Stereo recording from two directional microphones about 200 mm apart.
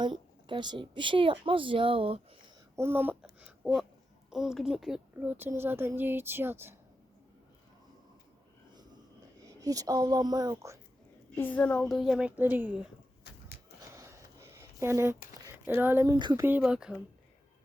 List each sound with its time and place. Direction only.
0.0 s a woman's voice: 25° right (ahead or behind)
2.7 s a child's voice: 10° right (ahead or behind)
3.4 s a sound: 5° right (ahead or behind)
4.3 s a child's voice: centre (ahead or behind)
9.5 s a child's voice: 15° right (ahead or behind)
11.3 s a woman's voice: 10° left (ahead or behind); by 12.7 s 10° right (ahead or behind)
13.3 s a sound: 55° left (ahead or behind)
13.9 s a sound: 15° right (ahead or behind)
15.8 s a child's voice: 10° right (ahead or behind)